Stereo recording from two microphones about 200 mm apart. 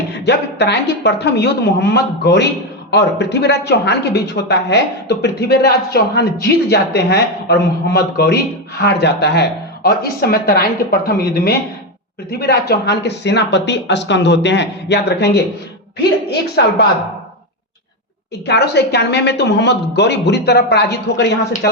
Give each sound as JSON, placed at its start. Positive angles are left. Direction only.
{"t": 0.3, "sound": "speech", "side_deg": 55}
{"t": 12.3, "sound": "a woman's voice", "side_deg": 50}
{"t": 18.4, "sound": "speech", "side_deg": 55}